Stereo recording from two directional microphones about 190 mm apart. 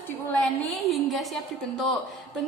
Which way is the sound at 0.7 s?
Centre (ahead or behind).